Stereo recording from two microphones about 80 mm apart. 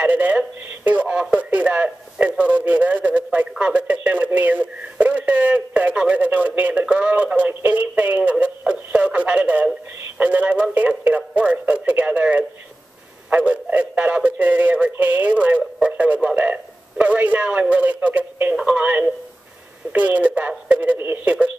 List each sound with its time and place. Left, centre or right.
0.0 s a man's voice: centre